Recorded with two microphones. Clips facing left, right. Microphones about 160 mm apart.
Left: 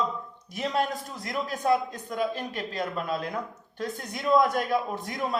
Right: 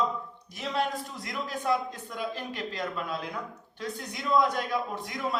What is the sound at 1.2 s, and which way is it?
Speech, 45° left (ahead or behind).